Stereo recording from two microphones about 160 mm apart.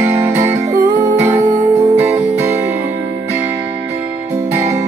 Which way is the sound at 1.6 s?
10° right (ahead or behind).